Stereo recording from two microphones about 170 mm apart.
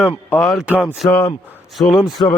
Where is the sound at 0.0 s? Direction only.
10° right (ahead or behind).